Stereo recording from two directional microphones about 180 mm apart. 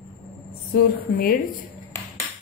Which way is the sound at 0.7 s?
55° left (ahead or behind).